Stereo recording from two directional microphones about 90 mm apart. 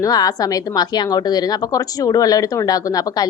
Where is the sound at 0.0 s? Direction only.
45° left (ahead or behind).